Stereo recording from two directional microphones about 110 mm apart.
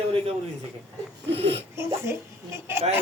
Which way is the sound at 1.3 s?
60° right (ahead or behind).